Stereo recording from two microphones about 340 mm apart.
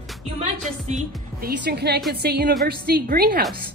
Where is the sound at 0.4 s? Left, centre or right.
Right.